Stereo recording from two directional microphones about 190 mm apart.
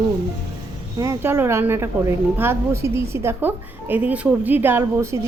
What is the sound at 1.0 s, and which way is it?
Speech, 15° right (ahead or behind).